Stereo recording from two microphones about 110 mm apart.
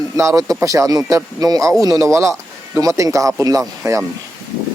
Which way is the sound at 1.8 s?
30° right (ahead or behind).